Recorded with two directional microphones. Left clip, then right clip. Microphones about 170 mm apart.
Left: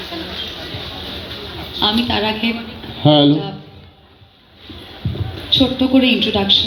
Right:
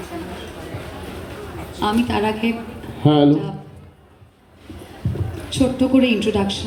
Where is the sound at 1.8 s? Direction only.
25° left (ahead or behind).